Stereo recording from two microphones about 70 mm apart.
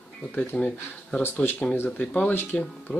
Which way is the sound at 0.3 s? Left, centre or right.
Left.